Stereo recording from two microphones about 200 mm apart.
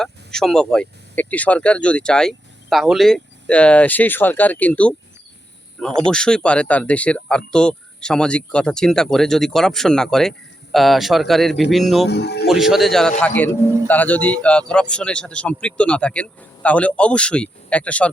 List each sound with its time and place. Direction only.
0.0 s speech: centre (ahead or behind)
6.1 s speech: 5° left (ahead or behind)
12.0 s speech: 55° left (ahead or behind)
12.5 s a man's voice: centre (ahead or behind)